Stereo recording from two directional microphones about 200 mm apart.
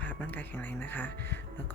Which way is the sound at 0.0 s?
10° left (ahead or behind).